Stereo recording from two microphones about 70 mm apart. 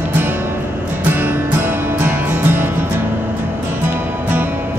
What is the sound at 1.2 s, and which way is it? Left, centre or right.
Music, right.